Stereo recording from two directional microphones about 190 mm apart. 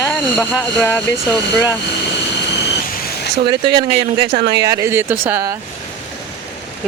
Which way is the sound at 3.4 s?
25° right (ahead or behind).